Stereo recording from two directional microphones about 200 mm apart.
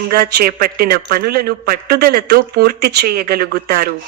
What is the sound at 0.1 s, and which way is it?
Speech, 50° right (ahead or behind).